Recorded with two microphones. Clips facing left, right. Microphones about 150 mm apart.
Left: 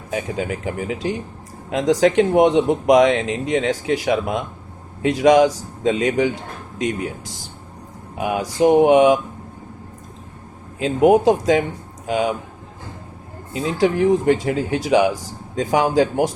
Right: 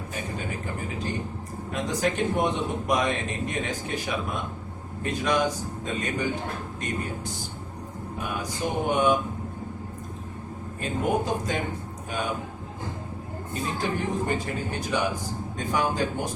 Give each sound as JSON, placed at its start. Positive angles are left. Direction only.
{"t": 0.1, "sound": "speech", "side_deg": 90}
{"t": 10.8, "sound": "speech", "side_deg": 90}
{"t": 13.5, "sound": "speech", "side_deg": 90}